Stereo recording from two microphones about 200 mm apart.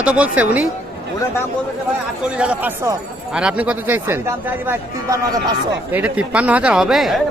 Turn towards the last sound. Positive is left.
turn(degrees=0)  # may be behind; listen again after turning